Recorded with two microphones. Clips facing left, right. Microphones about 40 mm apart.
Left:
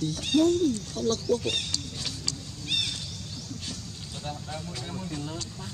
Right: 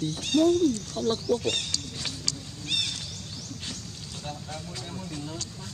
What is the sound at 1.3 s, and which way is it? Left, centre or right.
Speech, centre.